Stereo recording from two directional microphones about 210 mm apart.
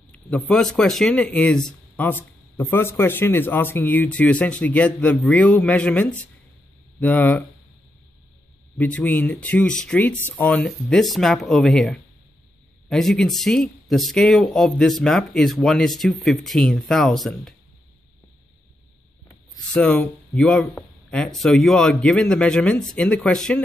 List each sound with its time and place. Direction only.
0.1 s speech: 5° left (ahead or behind)
8.7 s speech: 5° left (ahead or behind)
19.7 s speech: 5° left (ahead or behind)